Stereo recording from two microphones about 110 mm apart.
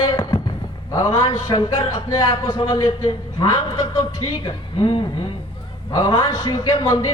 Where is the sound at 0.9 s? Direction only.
25° left (ahead or behind).